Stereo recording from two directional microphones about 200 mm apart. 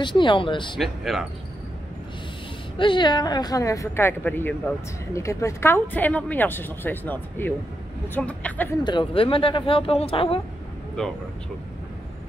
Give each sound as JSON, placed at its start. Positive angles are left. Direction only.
{"t": 0.0, "sound": "speech", "side_deg": 25}
{"t": 0.7, "sound": "speech", "side_deg": 0}
{"t": 2.8, "sound": "speech", "side_deg": 25}
{"t": 8.8, "sound": "speech", "side_deg": 25}